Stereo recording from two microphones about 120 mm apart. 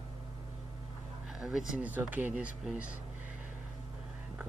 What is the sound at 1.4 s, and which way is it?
Speech, 5° right (ahead or behind).